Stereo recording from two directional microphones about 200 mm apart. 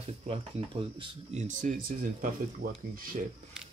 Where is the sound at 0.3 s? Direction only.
30° right (ahead or behind).